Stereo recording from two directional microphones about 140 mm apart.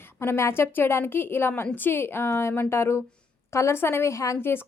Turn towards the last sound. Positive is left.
turn(degrees=20)  # may be behind; listen again after turning